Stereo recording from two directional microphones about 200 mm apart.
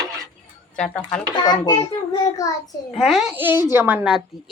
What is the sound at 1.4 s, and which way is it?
Speech, 20° left (ahead or behind).